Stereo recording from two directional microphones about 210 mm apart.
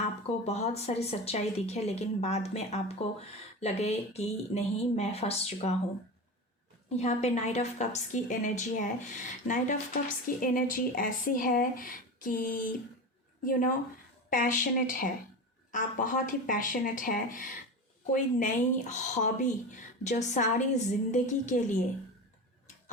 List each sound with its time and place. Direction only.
0.0 s speech: 30° left (ahead or behind)
6.9 s speech: 30° left (ahead or behind)
10.2 s speech: 40° left (ahead or behind)